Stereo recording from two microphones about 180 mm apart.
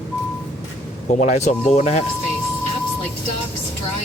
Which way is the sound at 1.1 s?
40° left (ahead or behind).